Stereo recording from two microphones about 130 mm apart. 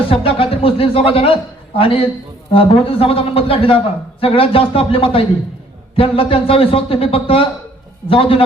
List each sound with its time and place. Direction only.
0.1 s a man's voice: 45° left (ahead or behind)